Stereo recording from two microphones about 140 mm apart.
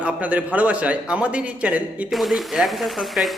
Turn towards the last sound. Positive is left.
turn(degrees=0)  # may be behind; listen again after turning